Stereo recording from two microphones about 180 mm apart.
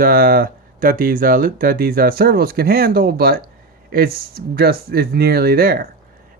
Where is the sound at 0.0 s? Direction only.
55° right (ahead or behind).